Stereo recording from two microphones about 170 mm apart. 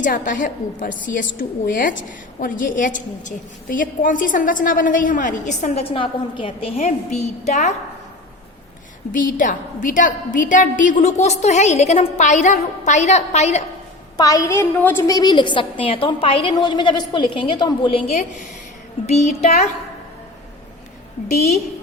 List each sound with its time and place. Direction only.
0.0 s a woman's voice: 50° left (ahead or behind)
9.1 s a woman's voice: 55° left (ahead or behind)
14.2 s a woman's voice: 20° left (ahead or behind)
19.0 s a child's voice: 40° left (ahead or behind)